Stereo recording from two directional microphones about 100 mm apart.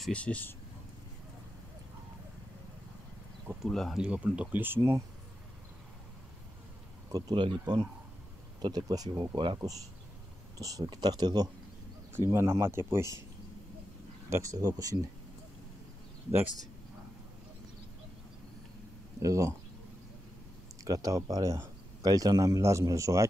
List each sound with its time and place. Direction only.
0.1 s speech: 15° left (ahead or behind)
3.6 s speech: centre (ahead or behind)
4.0 s speech: 10° right (ahead or behind)
7.1 s speech: 40° right (ahead or behind)
10.6 s speech: 35° right (ahead or behind)
12.3 s speech: 30° right (ahead or behind)
14.3 s speech: 35° right (ahead or behind)
19.2 s speech: 30° right (ahead or behind)
20.8 s speech: 35° right (ahead or behind)